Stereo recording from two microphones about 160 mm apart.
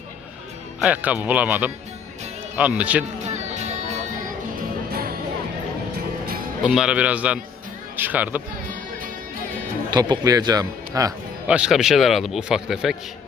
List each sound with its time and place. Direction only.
0.8 s speech: 10° right (ahead or behind)
3.2 s music: 45° right (ahead or behind)
6.7 s speech: 5° right (ahead or behind)
9.9 s speech: 25° right (ahead or behind)
11.4 s a man's voice: 5° right (ahead or behind)